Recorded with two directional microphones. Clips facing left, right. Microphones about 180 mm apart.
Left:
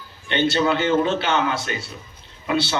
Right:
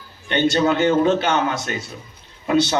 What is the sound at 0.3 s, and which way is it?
Speech, 45° right (ahead or behind).